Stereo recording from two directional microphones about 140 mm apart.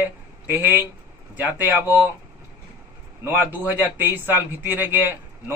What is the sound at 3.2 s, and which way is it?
A man's voice, 15° right (ahead or behind).